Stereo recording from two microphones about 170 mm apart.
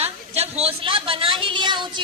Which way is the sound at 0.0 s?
35° right (ahead or behind).